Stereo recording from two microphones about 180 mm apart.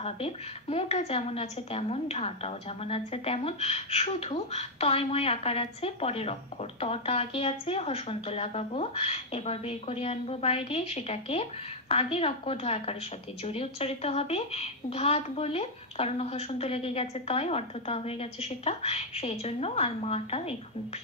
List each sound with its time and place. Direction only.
0.0 s a woman's voice: 35° left (ahead or behind)